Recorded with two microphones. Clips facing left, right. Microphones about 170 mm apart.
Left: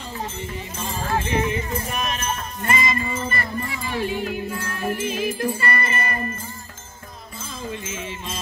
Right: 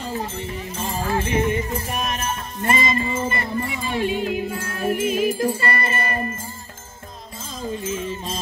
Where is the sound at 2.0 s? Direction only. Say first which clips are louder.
Right 1 dB; 35° right (ahead or behind).